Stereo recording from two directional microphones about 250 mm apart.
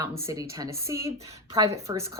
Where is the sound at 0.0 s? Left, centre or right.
Centre.